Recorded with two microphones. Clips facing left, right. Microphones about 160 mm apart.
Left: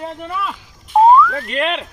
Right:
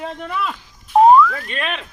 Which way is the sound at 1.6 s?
30° left (ahead or behind).